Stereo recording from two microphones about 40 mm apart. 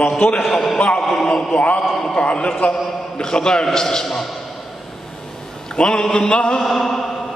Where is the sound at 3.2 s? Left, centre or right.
Centre.